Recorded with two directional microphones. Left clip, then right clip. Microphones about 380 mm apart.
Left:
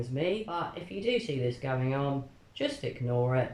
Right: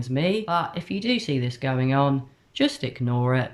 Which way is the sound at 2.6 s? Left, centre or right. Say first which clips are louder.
Right 8 dB; right.